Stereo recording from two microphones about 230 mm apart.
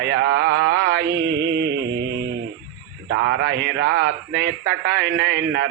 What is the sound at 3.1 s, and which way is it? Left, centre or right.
Speech, right.